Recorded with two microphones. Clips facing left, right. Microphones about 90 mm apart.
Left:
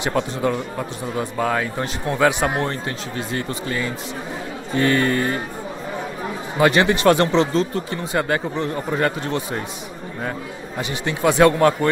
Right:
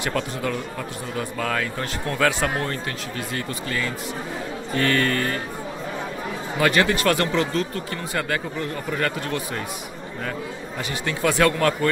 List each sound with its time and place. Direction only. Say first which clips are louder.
0.0 s speech: left 4 dB; 25° left (ahead or behind)
6.6 s speech: left 4 dB; 25° left (ahead or behind)
10.8 s speech: left 3 dB; 20° left (ahead or behind)